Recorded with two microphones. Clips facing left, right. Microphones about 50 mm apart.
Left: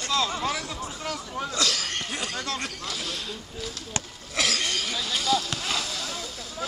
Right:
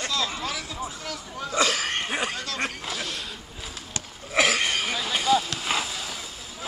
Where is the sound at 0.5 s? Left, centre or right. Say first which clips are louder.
Left 2 dB; centre.